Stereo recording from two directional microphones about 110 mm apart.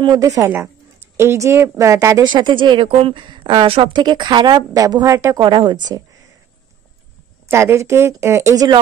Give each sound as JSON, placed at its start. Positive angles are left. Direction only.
{"t": 0.0, "sound": "a woman's voice", "side_deg": -35}
{"t": 2.2, "sound": "speech", "side_deg": -45}
{"t": 5.3, "sound": "speech", "side_deg": -45}
{"t": 7.4, "sound": "a woman's voice", "side_deg": -25}